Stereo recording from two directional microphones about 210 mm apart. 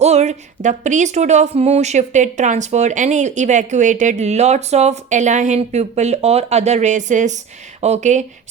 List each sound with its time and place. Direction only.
0.0 s a woman's voice: 30° right (ahead or behind)